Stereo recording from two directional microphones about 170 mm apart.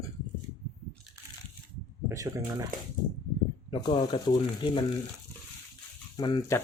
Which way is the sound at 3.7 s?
25° left (ahead or behind).